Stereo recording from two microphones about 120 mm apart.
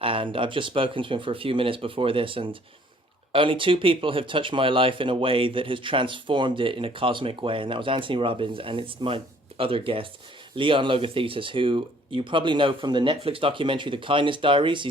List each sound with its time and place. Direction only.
0.0 s speech: 50° right (ahead or behind)